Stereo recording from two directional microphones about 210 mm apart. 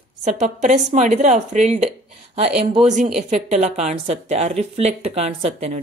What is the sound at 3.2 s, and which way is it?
A woman's voice, 35° right (ahead or behind).